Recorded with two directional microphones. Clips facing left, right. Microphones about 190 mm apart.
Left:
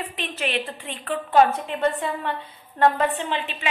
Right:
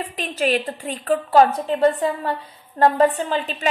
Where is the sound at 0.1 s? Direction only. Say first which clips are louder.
Right 10 dB; 40° right (ahead or behind).